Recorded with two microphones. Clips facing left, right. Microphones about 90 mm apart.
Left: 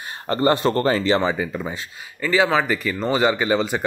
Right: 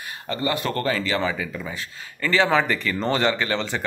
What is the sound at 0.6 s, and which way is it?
Speech, 30° left (ahead or behind).